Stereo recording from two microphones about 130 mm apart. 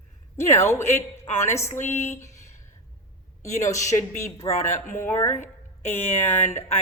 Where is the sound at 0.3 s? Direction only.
20° left (ahead or behind).